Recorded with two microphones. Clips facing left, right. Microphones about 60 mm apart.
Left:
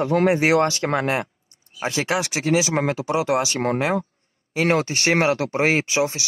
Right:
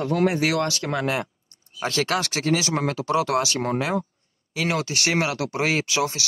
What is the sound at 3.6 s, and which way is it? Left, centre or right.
Speech, left.